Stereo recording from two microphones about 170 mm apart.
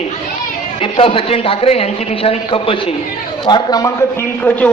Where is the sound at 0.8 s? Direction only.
30° left (ahead or behind).